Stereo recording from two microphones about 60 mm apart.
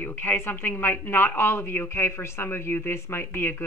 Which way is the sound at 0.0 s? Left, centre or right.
Left.